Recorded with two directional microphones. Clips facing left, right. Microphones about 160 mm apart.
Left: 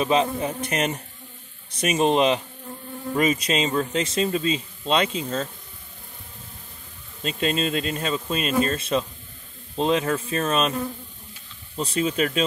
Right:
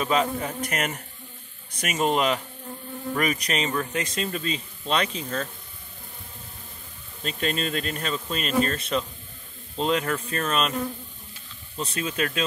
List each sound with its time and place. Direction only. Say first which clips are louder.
0.0 s speech: left 3 dB; 20° left (ahead or behind)
7.2 s speech: left 3 dB; 25° left (ahead or behind)
11.9 s speech: left 6 dB; 25° left (ahead or behind)